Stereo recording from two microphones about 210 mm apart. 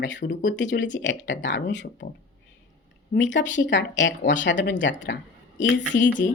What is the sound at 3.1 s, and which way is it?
Speech, 60° left (ahead or behind).